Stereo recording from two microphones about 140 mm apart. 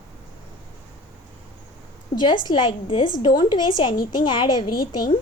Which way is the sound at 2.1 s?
30° left (ahead or behind).